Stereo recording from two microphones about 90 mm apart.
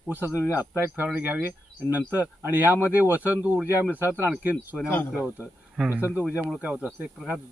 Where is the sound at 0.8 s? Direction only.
20° right (ahead or behind).